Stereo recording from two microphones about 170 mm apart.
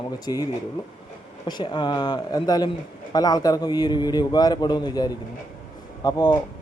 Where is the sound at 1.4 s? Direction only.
25° left (ahead or behind).